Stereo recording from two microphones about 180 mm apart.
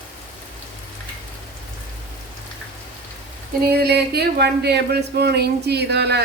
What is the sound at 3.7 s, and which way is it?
Speech, 60° right (ahead or behind).